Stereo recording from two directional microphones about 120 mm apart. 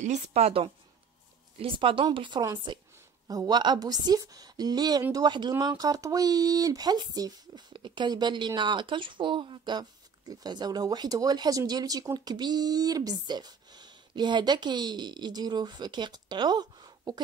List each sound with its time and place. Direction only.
0.0 s a woman's voice: 70° right (ahead or behind)
1.6 s speech: 45° right (ahead or behind)